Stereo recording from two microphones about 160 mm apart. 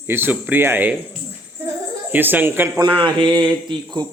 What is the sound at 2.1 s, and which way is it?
Speech, 10° right (ahead or behind).